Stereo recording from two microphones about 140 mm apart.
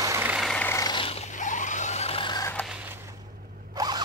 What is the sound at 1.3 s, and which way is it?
Vehicle, 65° left (ahead or behind).